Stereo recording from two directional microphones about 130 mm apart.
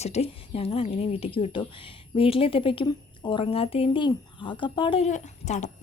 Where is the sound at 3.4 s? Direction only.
50° left (ahead or behind).